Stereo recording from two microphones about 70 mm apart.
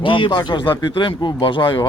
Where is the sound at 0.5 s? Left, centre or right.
Left.